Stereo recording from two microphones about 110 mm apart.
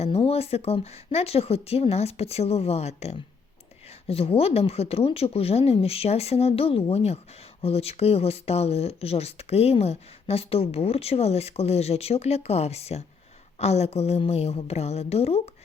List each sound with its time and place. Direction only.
0.0 s speech: 65° left (ahead or behind)
4.0 s speech: 60° left (ahead or behind)